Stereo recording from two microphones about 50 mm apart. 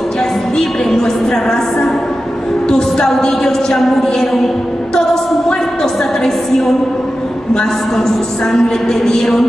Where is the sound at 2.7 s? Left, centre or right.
Centre.